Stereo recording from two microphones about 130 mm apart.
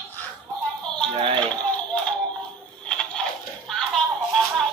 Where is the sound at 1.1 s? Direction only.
45° right (ahead or behind).